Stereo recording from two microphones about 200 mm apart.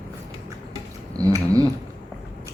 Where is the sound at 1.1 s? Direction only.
15° right (ahead or behind).